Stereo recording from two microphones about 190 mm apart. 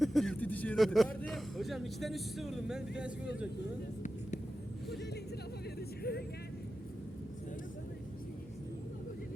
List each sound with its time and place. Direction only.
0.0 s a man's voice: centre (ahead or behind)
6.0 s speech: 55° left (ahead or behind)